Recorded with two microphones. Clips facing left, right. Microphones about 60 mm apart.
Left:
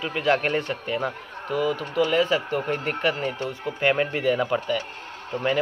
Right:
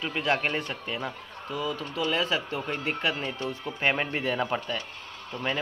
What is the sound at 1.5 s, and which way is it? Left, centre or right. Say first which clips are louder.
Speech: left 7 dB; left.